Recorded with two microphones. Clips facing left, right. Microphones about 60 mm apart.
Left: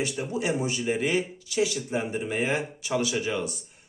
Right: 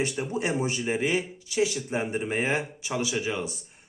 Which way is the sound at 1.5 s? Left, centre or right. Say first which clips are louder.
Right 3 dB; right.